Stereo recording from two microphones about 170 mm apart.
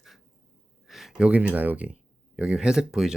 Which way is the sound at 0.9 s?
Centre (ahead or behind).